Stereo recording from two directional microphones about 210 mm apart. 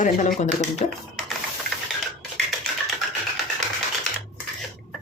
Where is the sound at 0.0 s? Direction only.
35° left (ahead or behind).